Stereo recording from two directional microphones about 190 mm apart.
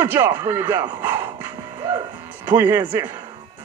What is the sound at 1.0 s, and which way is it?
Music, 10° right (ahead or behind).